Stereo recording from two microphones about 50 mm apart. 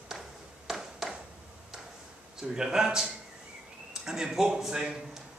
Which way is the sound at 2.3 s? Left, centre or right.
Centre.